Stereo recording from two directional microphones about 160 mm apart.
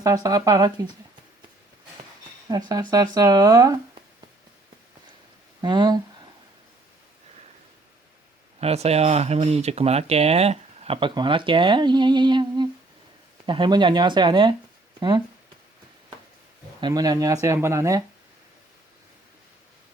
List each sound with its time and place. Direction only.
0.0 s speech: 20° right (ahead or behind)
2.5 s speech: 25° right (ahead or behind)
5.6 s speech: 25° right (ahead or behind)
8.6 s speech: 40° right (ahead or behind)
16.8 s speech: 25° right (ahead or behind)